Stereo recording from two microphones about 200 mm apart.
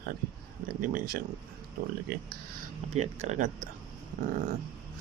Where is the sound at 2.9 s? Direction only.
35° right (ahead or behind).